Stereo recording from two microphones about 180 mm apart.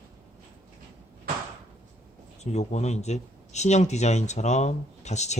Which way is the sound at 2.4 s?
40° left (ahead or behind).